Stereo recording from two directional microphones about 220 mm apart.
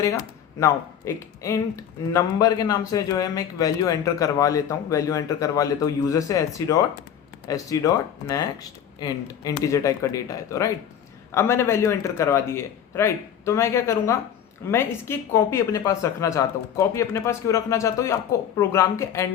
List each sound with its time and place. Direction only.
0.6 s speech: 15° left (ahead or behind)